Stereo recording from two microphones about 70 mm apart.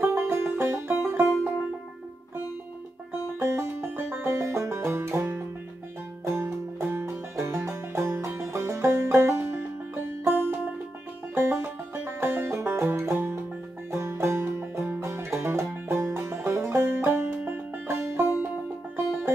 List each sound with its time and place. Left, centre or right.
0.1 s music: right
3.1 s music: right
4.3 s music: right